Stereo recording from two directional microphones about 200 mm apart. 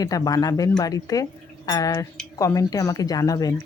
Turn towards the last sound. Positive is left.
turn(degrees=15)  # may be behind; listen again after turning